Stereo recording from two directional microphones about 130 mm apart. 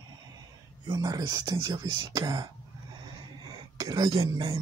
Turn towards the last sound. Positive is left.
turn(degrees=-30)  # may be behind; listen again after turning